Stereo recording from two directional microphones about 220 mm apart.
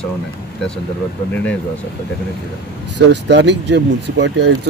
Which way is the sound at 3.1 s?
50° right (ahead or behind).